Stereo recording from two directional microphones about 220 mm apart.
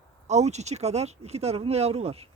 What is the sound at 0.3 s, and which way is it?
Speech, 30° right (ahead or behind).